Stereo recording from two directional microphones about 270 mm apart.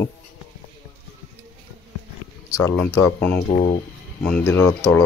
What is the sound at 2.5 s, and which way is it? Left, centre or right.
Speech, centre.